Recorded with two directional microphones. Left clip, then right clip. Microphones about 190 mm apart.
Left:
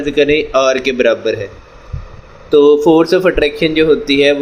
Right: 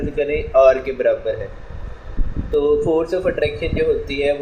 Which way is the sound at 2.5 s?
50° left (ahead or behind).